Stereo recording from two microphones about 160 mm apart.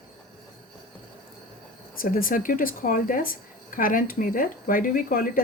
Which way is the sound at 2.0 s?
60° left (ahead or behind).